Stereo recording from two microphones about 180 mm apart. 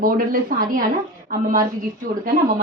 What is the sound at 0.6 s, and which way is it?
Speech, 50° right (ahead or behind).